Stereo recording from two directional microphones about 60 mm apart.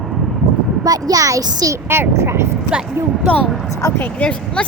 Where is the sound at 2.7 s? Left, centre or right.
Centre.